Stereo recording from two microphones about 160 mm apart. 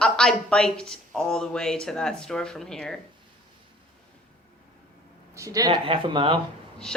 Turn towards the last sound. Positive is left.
turn(degrees=-35)  # may be behind; listen again after turning